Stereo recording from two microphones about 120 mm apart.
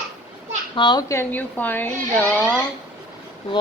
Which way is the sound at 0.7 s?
40° left (ahead or behind).